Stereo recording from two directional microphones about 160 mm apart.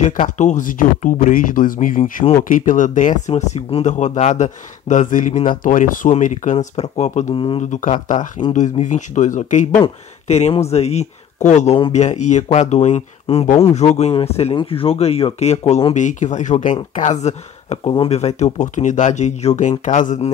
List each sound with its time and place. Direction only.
0.2 s speech: 50° left (ahead or behind)
7.3 s speech: 35° left (ahead or behind)
8.5 s speech: 50° left (ahead or behind)